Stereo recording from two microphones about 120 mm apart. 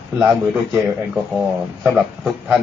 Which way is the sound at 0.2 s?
15° right (ahead or behind).